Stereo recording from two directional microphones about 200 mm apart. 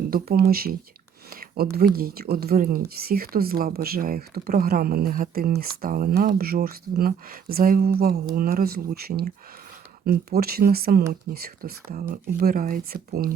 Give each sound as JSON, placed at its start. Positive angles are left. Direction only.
{"t": 0.1, "sound": "speech", "side_deg": -50}
{"t": 1.3, "sound": "a sound", "side_deg": -45}
{"t": 1.7, "sound": "speech", "side_deg": -50}